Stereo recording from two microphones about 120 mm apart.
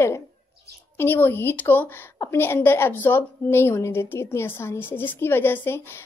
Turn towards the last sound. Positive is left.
turn(degrees=20)  # may be behind; listen again after turning